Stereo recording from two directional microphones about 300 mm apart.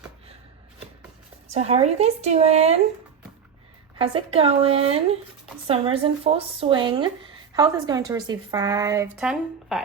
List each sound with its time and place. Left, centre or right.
1.5 s speech: right
3.9 s a woman's voice: centre